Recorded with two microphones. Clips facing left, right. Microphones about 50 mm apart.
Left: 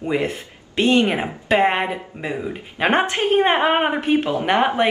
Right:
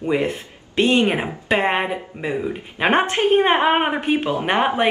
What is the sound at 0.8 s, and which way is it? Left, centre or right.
Speech, right.